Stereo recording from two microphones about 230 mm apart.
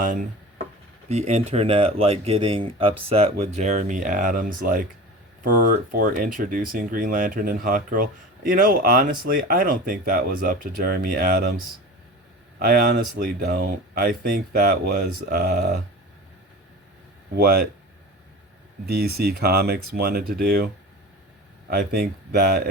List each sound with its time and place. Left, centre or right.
0.0 s speech: right
17.3 s speech: right
18.9 s speech: right
21.7 s speech: right